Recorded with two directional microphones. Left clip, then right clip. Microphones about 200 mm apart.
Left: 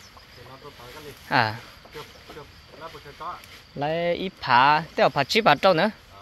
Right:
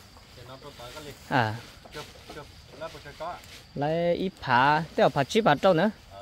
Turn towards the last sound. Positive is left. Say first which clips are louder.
# left 3 dB
turn(degrees=-15)  # may be behind; listen again after turning